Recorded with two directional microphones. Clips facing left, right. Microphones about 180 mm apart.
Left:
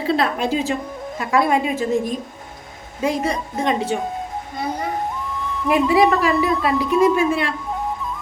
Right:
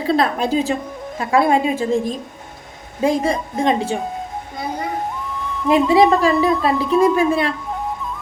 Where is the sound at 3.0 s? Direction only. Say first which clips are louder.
Right 3 dB; 30° right (ahead or behind).